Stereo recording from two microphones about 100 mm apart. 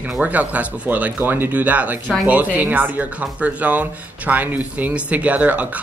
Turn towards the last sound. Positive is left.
turn(degrees=-15)  # may be behind; listen again after turning